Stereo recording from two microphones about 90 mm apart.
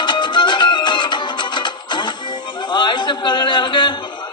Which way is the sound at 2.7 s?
60° left (ahead or behind).